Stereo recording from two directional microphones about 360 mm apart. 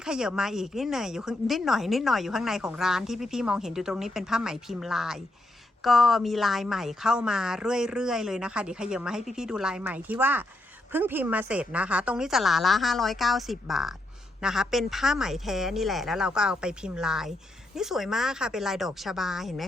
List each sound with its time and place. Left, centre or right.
0.0 s speech: centre